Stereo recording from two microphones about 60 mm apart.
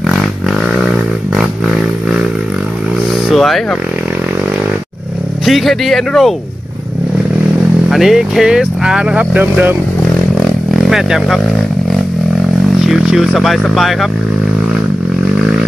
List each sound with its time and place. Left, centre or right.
0.0 s a sound: centre
3.3 s a sound: centre
5.4 s speech: centre
7.9 s speech: centre
9.2 s speech: right
10.4 s vehicle: centre
12.8 s speech: centre